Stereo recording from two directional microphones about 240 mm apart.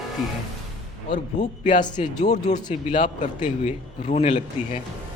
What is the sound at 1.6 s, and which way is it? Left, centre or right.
A man's voice, centre.